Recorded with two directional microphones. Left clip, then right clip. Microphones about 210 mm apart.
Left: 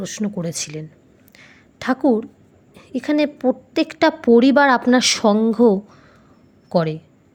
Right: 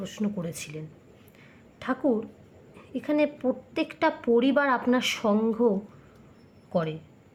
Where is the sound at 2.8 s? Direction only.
25° left (ahead or behind).